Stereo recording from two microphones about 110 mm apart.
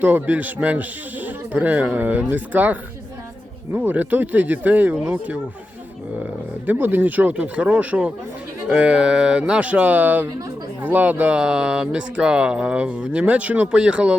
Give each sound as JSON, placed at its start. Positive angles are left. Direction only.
{"t": 0.0, "sound": "speech", "side_deg": -15}
{"t": 6.7, "sound": "speech", "side_deg": -15}